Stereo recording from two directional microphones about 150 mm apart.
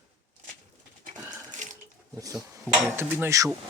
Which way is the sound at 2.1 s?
20° right (ahead or behind).